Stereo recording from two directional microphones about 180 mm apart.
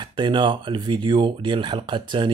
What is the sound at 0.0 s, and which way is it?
Speech, 25° right (ahead or behind).